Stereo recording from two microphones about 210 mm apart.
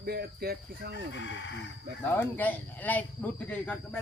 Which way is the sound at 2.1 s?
10° left (ahead or behind).